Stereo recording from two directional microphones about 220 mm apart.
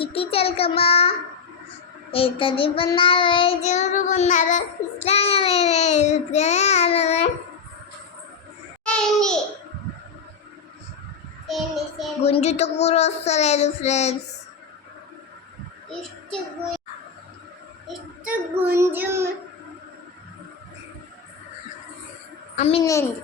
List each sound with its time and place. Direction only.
0.0 s child singing: 25° left (ahead or behind)
2.1 s child singing: 25° left (ahead or behind)
8.8 s a child's voice: 5° left (ahead or behind)
11.4 s child singing: centre (ahead or behind)
12.2 s child singing: 30° left (ahead or behind)
15.9 s a child's voice: 5° left (ahead or behind)
17.8 s a child's voice: 10° right (ahead or behind)
22.5 s a child's voice: 30° left (ahead or behind)
22.8 s a child's voice: 15° left (ahead or behind)